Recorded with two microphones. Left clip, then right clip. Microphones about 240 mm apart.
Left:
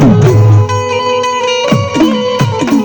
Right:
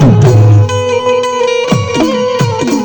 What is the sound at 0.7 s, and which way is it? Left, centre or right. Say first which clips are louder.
Music: right 2 dB; right.